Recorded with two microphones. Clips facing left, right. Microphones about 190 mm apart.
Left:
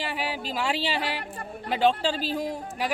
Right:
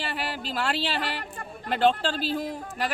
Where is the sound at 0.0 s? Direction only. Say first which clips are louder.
Left 1 dB; 10° left (ahead or behind).